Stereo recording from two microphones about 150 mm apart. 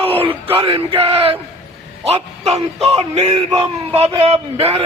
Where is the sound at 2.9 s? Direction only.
45° right (ahead or behind).